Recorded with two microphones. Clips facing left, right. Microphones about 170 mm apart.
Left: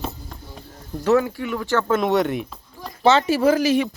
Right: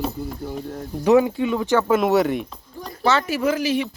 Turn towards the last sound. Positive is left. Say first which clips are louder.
# left 4 dB
turn(degrees=45)  # may be behind; listen again after turning